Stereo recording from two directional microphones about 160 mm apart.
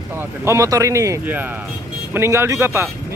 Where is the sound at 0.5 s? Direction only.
20° right (ahead or behind).